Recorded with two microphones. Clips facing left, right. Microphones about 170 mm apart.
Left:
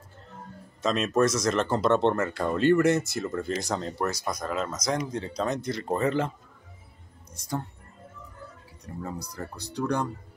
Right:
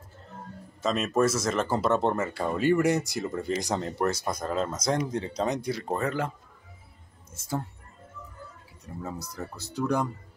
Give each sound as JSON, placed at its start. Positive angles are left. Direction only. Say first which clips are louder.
{"t": 0.8, "sound": "speech", "louder": "left 1 dB", "side_deg": -5}
{"t": 4.0, "sound": "speech", "louder": "right 2 dB", "side_deg": -25}
{"t": 7.3, "sound": "speech", "louder": "even", "side_deg": -5}
{"t": 8.8, "sound": "speech", "louder": "left 1 dB", "side_deg": -5}